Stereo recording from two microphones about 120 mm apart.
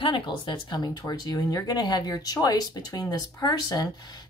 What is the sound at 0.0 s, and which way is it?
Speech, 40° left (ahead or behind).